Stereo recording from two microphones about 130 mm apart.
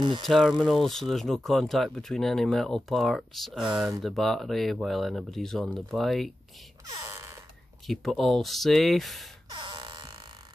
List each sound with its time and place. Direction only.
0.2 s speech: centre (ahead or behind)
6.9 s speech: 25° right (ahead or behind)
7.8 s speech: centre (ahead or behind)
9.5 s music: 35° right (ahead or behind)